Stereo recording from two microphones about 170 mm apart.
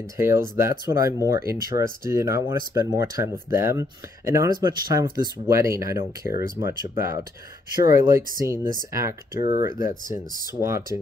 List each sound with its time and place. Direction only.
0.2 s speech: 15° right (ahead or behind)